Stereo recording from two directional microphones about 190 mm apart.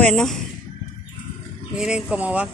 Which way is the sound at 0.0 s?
Centre (ahead or behind).